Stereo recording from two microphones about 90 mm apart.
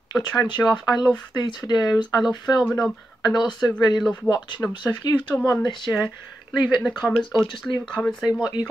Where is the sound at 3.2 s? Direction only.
55° left (ahead or behind).